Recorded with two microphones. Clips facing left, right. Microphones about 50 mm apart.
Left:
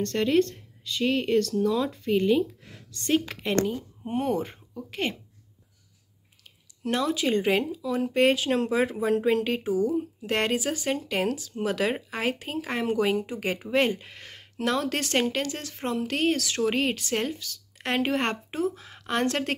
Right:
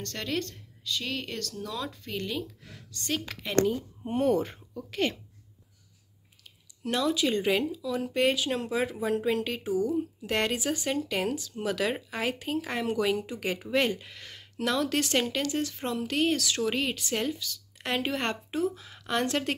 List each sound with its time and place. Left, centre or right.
0.0 s speech: left
3.6 s a woman's voice: centre
6.8 s speech: left